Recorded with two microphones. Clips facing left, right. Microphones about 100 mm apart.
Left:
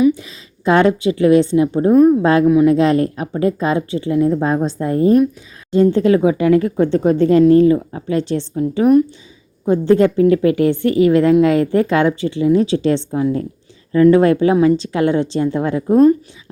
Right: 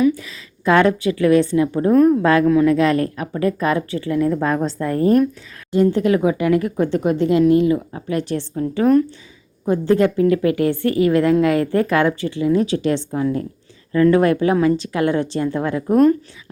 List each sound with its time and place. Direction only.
0.0 s a woman's voice: 25° left (ahead or behind)
1.9 s speech: 10° left (ahead or behind)
2.7 s speech: 25° left (ahead or behind)
7.9 s speech: 25° left (ahead or behind)